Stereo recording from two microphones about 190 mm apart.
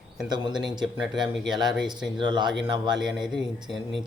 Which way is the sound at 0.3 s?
20° right (ahead or behind).